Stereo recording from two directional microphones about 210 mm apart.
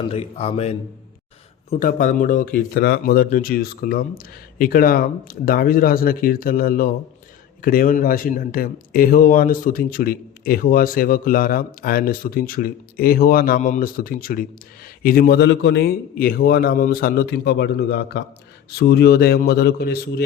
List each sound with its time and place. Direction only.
0.1 s a man's voice: 30° left (ahead or behind); by 20.2 s 50° left (ahead or behind)